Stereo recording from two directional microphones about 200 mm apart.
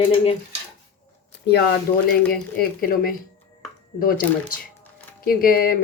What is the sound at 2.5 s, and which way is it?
Speech, 45° left (ahead or behind).